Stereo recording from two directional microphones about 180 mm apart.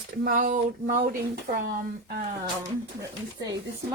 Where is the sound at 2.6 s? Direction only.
20° right (ahead or behind).